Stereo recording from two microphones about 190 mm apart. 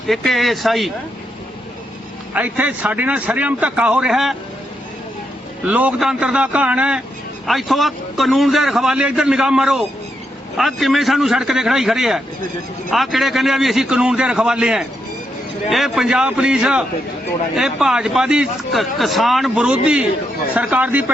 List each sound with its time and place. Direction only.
0.1 s a man's voice: centre (ahead or behind)
2.3 s a man's voice: 10° right (ahead or behind)
5.6 s a man's voice: 10° right (ahead or behind)